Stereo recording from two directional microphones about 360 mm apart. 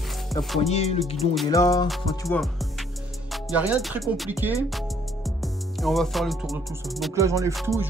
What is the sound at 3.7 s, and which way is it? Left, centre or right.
Music, centre.